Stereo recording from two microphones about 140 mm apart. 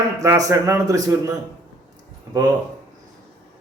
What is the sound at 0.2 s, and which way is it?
Speech, 25° right (ahead or behind).